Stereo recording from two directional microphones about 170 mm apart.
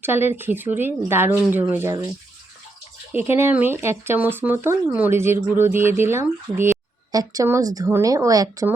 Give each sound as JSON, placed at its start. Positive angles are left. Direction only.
{"t": 0.0, "sound": "speech", "side_deg": -15}
{"t": 3.1, "sound": "speech", "side_deg": -15}